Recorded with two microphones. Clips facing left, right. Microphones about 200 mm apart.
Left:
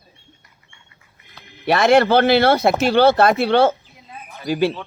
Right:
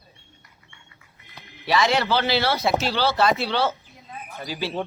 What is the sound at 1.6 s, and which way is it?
Speech, 55° left (ahead or behind).